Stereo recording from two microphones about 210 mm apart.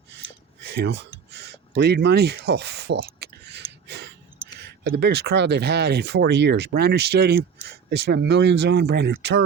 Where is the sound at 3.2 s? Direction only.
55° right (ahead or behind).